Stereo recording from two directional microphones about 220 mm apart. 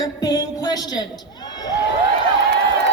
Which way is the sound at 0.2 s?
15° left (ahead or behind).